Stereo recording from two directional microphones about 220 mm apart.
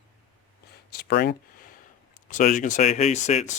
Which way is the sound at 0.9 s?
45° left (ahead or behind).